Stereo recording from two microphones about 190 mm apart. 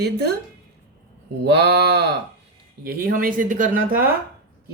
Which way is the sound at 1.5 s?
60° right (ahead or behind).